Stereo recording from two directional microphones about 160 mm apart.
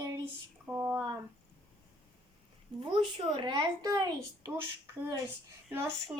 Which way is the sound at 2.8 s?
30° right (ahead or behind).